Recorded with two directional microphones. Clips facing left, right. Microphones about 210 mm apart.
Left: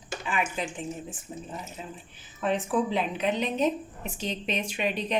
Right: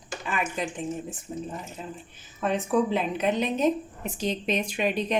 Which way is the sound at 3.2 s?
45° right (ahead or behind).